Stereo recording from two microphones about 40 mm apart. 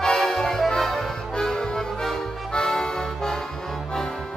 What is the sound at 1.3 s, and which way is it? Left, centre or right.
Accordion, centre.